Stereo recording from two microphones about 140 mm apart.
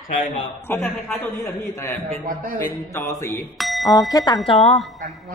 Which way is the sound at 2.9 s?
20° left (ahead or behind).